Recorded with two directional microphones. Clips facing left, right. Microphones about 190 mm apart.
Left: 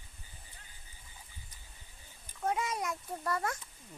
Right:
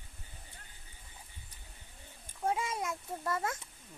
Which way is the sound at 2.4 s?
25° right (ahead or behind).